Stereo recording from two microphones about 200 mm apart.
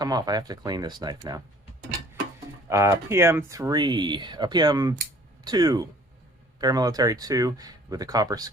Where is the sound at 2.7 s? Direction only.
15° right (ahead or behind).